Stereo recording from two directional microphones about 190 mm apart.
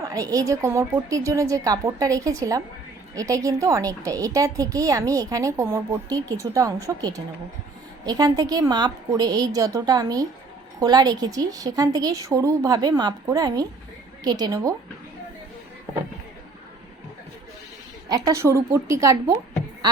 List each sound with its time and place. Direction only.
0.0 s a woman's voice: 20° right (ahead or behind)
18.1 s a woman's voice: 15° right (ahead or behind)